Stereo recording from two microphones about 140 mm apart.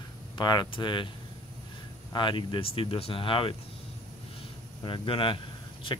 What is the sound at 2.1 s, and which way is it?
Speech, 35° left (ahead or behind).